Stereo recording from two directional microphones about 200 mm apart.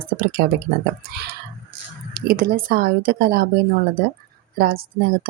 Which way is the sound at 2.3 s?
45° right (ahead or behind).